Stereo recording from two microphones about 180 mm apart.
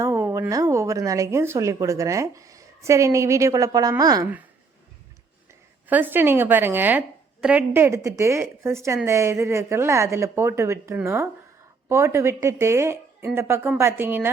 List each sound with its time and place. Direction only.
0.0 s speech: 15° right (ahead or behind)
5.9 s speech: 10° right (ahead or behind)